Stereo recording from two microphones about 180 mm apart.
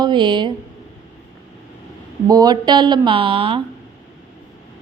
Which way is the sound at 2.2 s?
20° right (ahead or behind).